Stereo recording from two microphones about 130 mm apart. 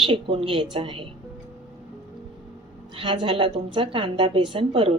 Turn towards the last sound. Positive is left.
turn(degrees=-45)  # may be behind; listen again after turning